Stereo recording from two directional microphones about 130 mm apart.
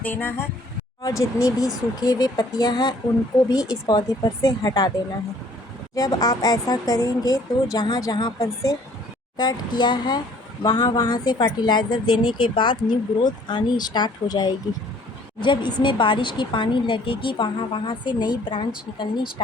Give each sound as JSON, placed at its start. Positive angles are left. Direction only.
{"t": 0.0, "sound": "a woman's voice", "side_deg": 15}
{"t": 5.9, "sound": "a woman's voice", "side_deg": 30}